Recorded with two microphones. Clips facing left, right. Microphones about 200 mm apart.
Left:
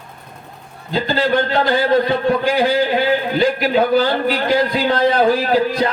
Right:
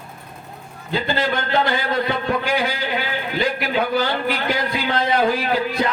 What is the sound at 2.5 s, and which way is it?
Speech, 35° left (ahead or behind).